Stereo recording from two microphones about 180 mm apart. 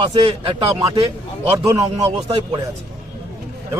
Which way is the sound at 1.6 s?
20° right (ahead or behind).